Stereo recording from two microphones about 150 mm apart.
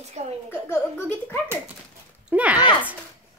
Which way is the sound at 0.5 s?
15° left (ahead or behind).